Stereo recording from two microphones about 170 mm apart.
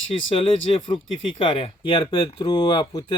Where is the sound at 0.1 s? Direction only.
30° left (ahead or behind).